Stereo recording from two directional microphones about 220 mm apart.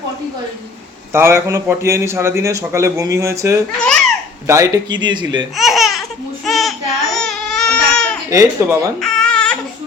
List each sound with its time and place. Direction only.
1.1 s a man's voice: 10° right (ahead or behind)
5.5 s a sound: centre (ahead or behind)
8.3 s a man's voice: 15° right (ahead or behind)
9.0 s baby cry: 5° left (ahead or behind)